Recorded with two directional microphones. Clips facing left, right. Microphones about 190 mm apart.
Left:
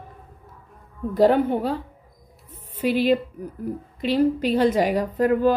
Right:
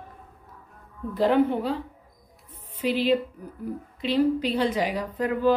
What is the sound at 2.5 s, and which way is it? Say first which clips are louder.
Music: left 3 dB; 45° left (ahead or behind).